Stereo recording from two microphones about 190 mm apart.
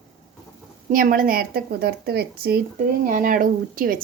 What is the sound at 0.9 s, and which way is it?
A woman's voice, 45° right (ahead or behind).